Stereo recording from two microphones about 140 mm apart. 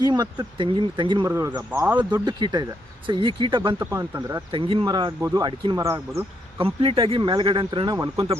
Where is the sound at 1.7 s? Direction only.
15° right (ahead or behind).